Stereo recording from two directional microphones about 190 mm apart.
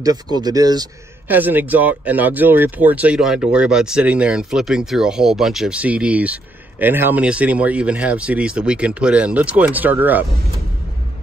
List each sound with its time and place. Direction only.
0.0 s speech: 20° right (ahead or behind)
1.2 s speech: 10° right (ahead or behind)